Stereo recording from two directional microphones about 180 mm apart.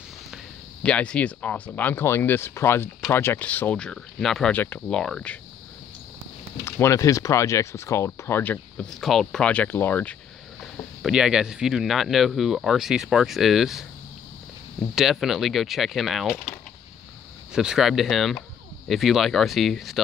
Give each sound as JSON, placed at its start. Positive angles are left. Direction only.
{"t": 0.8, "sound": "speech", "side_deg": 5}
{"t": 6.6, "sound": "speech", "side_deg": 15}
{"t": 11.0, "sound": "speech", "side_deg": -5}
{"t": 15.0, "sound": "speech", "side_deg": 0}